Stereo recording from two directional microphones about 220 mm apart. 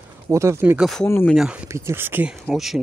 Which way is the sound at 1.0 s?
10° left (ahead or behind).